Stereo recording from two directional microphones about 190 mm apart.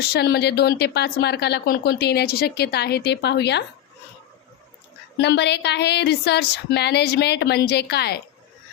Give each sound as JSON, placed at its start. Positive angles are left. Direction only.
{"t": 0.0, "sound": "a woman's voice", "side_deg": 60}
{"t": 5.2, "sound": "a woman's voice", "side_deg": 60}